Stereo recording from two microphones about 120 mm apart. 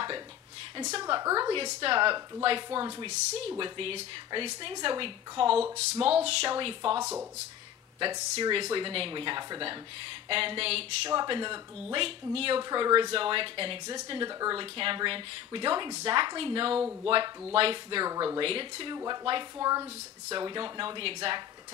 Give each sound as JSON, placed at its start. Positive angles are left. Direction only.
{"t": 0.9, "sound": "speech", "side_deg": -40}
{"t": 1.2, "sound": "a woman's voice", "side_deg": -30}
{"t": 1.5, "sound": "speech", "side_deg": -45}
{"t": 5.8, "sound": "speech", "side_deg": -60}
{"t": 6.2, "sound": "speech", "side_deg": -45}
{"t": 8.0, "sound": "speech", "side_deg": -40}
{"t": 11.1, "sound": "speech", "side_deg": -40}
{"t": 18.0, "sound": "speech", "side_deg": -30}
{"t": 18.4, "sound": "speech", "side_deg": -50}
{"t": 19.6, "sound": "speech", "side_deg": -30}
{"t": 20.3, "sound": "speech", "side_deg": -40}